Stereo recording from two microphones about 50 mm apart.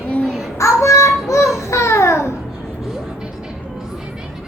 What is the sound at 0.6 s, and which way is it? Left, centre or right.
Child singing, left.